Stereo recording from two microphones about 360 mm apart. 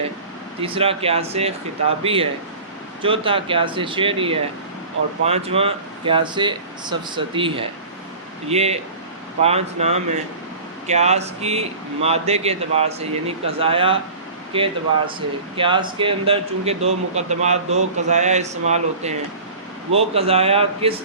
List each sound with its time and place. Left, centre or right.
0.6 s a man's voice: centre